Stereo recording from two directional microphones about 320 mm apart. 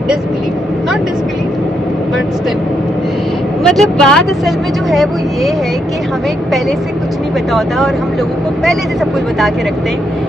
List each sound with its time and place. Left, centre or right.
3.6 s speech: centre